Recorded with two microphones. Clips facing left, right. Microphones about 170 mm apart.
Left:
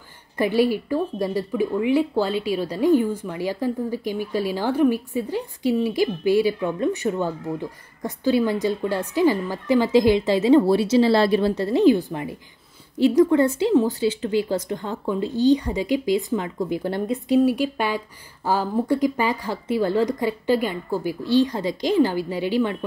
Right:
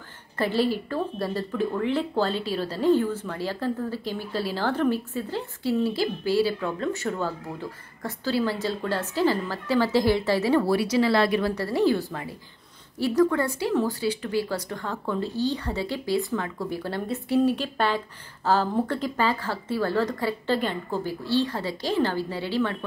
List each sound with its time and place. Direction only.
0.4 s a woman's voice: 15° left (ahead or behind)